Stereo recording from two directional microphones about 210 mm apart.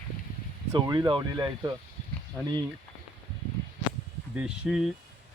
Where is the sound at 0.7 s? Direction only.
20° right (ahead or behind).